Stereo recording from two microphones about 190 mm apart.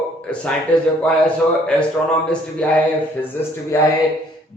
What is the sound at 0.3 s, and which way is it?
Speech, 5° left (ahead or behind).